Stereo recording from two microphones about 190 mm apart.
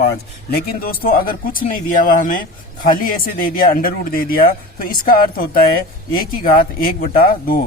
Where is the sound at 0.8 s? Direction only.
50° left (ahead or behind).